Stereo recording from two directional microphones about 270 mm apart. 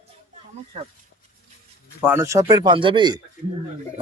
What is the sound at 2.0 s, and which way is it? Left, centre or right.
Speech, centre.